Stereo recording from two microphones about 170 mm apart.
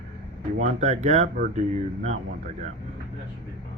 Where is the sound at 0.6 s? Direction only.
40° right (ahead or behind).